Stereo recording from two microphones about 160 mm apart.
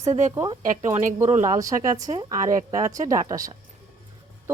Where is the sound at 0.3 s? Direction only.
20° right (ahead or behind).